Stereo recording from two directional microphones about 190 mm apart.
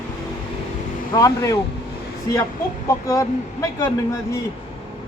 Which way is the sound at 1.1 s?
15° left (ahead or behind).